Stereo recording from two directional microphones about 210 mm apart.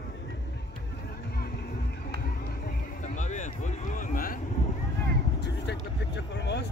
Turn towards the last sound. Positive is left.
turn(degrees=55)  # may be behind; listen again after turning